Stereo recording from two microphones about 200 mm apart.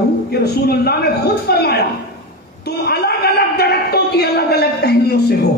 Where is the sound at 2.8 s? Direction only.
50° left (ahead or behind).